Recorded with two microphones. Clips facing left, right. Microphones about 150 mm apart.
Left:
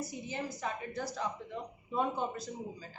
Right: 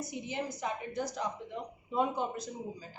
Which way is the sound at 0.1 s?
15° right (ahead or behind).